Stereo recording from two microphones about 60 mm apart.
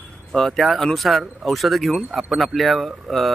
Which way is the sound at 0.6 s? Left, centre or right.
Centre.